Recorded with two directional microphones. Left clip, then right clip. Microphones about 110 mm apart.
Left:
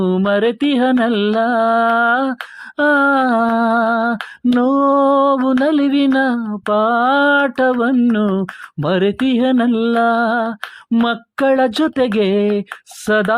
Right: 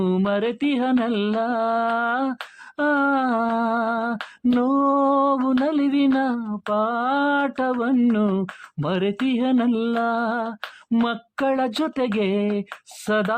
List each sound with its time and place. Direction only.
0.0 s music: 30° left (ahead or behind)
13.1 s speech: 30° left (ahead or behind)